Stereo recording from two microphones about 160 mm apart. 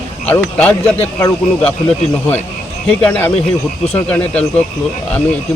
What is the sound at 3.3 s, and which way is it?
Speech, 40° left (ahead or behind).